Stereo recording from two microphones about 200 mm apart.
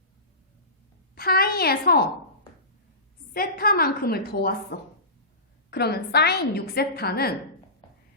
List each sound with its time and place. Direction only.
1.1 s a woman's voice: 50° left (ahead or behind)
3.3 s a woman's voice: 50° left (ahead or behind)
5.7 s a woman's voice: 55° left (ahead or behind)